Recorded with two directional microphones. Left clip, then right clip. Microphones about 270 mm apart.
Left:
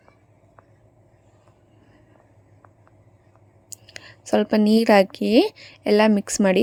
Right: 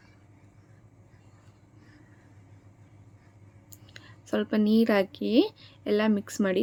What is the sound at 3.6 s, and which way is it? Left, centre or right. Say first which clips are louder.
A woman's voice: left 10 dB; left.